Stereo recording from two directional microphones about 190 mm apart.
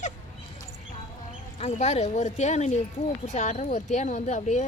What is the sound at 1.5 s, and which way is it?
Speech, 35° left (ahead or behind).